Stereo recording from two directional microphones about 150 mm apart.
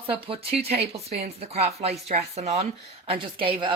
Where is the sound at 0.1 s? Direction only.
40° right (ahead or behind).